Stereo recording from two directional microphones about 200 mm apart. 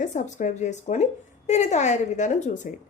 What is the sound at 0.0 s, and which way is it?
A woman's voice, 40° left (ahead or behind).